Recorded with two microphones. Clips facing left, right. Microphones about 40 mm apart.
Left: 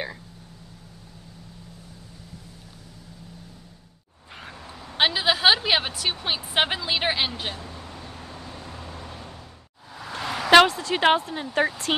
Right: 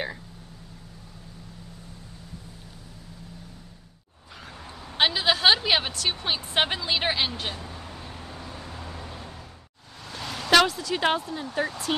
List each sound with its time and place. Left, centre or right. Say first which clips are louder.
4.3 s car: left 3 dB; left
4.9 s a woman's voice: left 1 dB; centre
7.6 s vehicle: even; centre
8.8 s vehicle: even; right
10.1 s a sound: left 5 dB; left
10.5 s speech: left 4 dB; left